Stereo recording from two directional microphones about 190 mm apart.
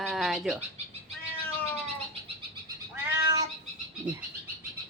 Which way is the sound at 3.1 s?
20° right (ahead or behind).